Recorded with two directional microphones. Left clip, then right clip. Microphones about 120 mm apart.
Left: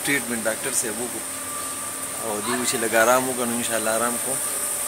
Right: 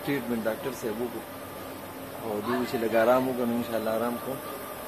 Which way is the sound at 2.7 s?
15° left (ahead or behind).